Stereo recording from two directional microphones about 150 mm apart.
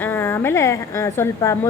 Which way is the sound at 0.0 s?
15° left (ahead or behind).